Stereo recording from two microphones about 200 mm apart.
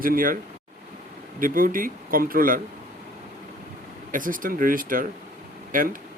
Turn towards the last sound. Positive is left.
turn(degrees=-45)  # may be behind; listen again after turning